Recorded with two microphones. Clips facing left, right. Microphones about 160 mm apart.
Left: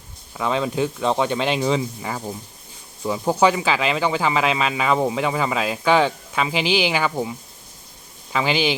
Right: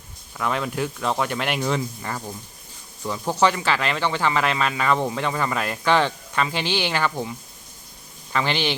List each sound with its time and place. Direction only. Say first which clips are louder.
0.3 s speech: left 3 dB; 25° left (ahead or behind)
1.6 s speech: left 3 dB; 10° left (ahead or behind)